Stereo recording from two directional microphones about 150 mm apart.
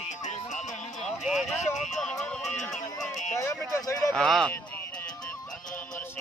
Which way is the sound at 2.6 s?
Centre (ahead or behind).